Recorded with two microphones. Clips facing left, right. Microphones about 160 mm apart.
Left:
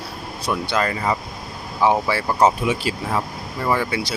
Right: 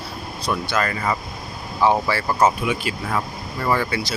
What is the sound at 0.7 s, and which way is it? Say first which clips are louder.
Speech: left 2 dB; 20° left (ahead or behind).